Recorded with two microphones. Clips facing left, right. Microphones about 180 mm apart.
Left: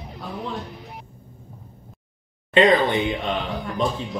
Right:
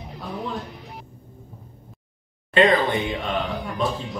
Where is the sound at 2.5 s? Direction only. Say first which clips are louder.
Left 2 dB; 20° left (ahead or behind).